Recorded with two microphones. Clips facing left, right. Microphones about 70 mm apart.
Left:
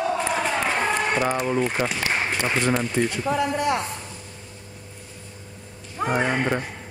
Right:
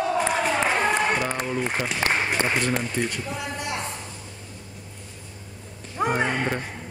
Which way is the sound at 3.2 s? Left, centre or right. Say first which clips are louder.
Left 9 dB; left.